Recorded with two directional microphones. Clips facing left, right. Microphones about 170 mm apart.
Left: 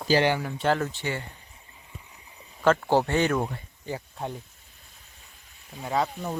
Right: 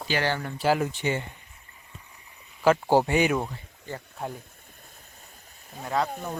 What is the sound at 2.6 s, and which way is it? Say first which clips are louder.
Speech: right 1 dB; 10° right (ahead or behind).